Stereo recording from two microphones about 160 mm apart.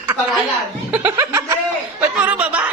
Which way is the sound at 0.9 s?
15° right (ahead or behind).